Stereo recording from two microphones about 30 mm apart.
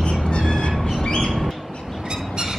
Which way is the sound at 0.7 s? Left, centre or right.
Centre.